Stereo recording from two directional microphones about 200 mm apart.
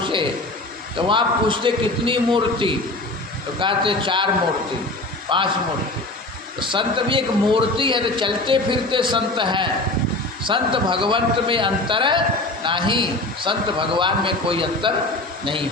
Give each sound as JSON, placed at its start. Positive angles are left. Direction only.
{"t": 0.0, "sound": "a sound", "side_deg": -25}
{"t": 0.9, "sound": "a man's voice", "side_deg": -25}
{"t": 5.3, "sound": "a man's voice", "side_deg": -25}
{"t": 6.6, "sound": "a man's voice", "side_deg": -25}